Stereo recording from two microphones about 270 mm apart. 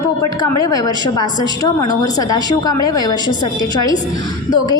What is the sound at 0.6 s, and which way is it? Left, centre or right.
A woman's voice, centre.